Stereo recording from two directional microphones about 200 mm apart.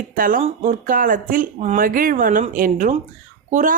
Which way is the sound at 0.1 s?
45° right (ahead or behind).